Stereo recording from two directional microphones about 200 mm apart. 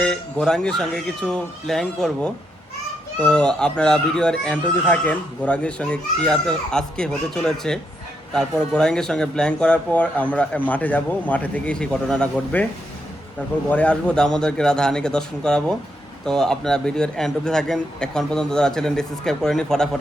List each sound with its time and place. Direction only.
0.0 s speech: 5° left (ahead or behind)
13.7 s speech: 5° left (ahead or behind)